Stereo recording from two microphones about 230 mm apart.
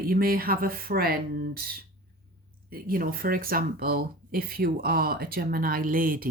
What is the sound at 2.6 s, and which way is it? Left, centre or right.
Speech, right.